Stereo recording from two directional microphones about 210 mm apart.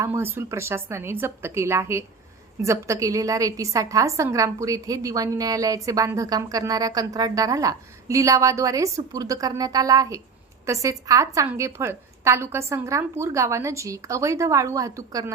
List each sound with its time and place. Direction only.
0.0 s a woman's voice: 10° right (ahead or behind)